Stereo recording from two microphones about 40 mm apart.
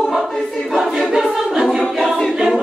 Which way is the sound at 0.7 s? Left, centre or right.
Centre.